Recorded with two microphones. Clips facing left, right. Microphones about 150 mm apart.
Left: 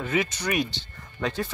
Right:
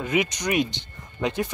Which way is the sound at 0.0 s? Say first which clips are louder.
Right 2 dB; 15° right (ahead or behind).